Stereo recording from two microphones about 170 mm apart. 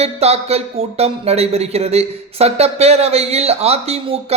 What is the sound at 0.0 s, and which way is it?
Speech, 40° right (ahead or behind).